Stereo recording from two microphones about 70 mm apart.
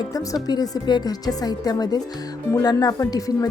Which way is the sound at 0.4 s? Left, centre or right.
Left.